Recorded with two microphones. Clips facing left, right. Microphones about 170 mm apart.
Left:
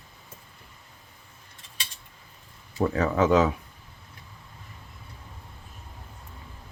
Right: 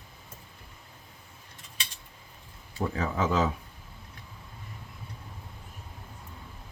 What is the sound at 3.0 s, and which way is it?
Speech, 70° left (ahead or behind).